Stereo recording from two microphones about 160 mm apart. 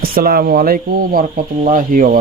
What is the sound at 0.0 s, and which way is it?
Speech, 65° right (ahead or behind).